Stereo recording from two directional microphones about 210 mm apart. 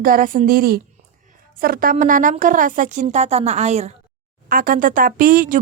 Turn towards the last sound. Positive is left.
turn(degrees=-40)  # may be behind; listen again after turning